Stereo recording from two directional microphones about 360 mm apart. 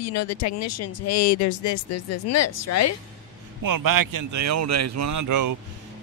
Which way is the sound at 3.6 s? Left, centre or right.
Right.